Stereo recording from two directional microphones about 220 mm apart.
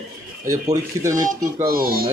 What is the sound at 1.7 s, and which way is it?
Speech, 40° right (ahead or behind).